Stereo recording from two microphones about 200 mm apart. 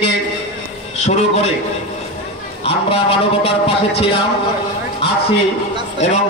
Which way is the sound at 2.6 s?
30° left (ahead or behind).